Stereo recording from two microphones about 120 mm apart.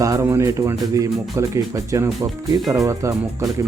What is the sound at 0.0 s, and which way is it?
Speech, 25° right (ahead or behind).